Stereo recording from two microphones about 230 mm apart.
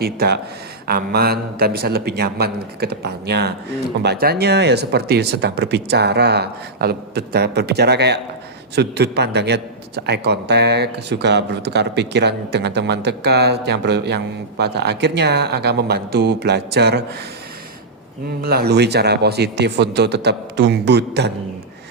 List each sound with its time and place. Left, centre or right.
0.0 s a man's voice: right
18.4 s a man's voice: right